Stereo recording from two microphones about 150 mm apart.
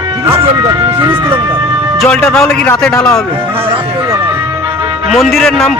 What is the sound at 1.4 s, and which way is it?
Music, 30° right (ahead or behind).